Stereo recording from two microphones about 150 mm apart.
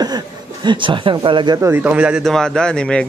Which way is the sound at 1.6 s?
15° right (ahead or behind).